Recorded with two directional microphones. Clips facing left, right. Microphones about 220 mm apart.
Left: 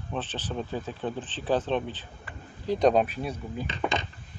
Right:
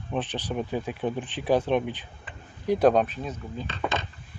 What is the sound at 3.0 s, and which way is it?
Speech, 10° left (ahead or behind).